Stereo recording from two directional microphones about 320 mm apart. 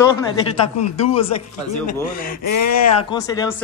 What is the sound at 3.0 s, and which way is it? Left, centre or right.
Speech, centre.